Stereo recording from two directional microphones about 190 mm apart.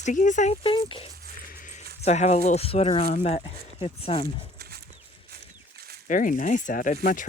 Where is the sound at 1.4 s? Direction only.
50° left (ahead or behind).